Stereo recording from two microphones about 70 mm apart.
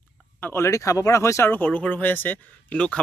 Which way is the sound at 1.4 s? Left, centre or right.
Left.